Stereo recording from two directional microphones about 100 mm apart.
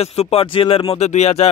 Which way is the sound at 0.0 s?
90° left.